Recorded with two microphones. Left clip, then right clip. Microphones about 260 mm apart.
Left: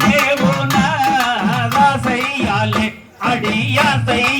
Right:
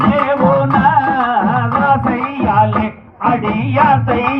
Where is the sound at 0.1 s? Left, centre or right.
Left.